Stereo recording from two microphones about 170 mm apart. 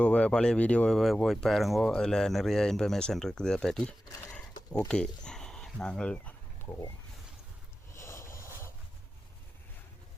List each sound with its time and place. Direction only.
0.0 s speech: 5° left (ahead or behind)
4.9 s dog: 5° left (ahead or behind)
7.9 s vehicle: 15° left (ahead or behind)
8.4 s a sound: 15° left (ahead or behind)